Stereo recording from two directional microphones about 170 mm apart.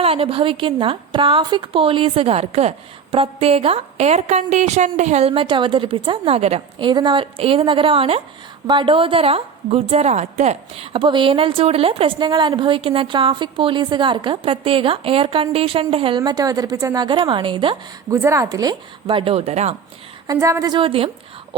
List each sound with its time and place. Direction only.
0.0 s a woman's voice: 35° right (ahead or behind)
18.1 s speech: 15° right (ahead or behind); by 19.7 s 40° right (ahead or behind)
20.2 s speech: 20° right (ahead or behind)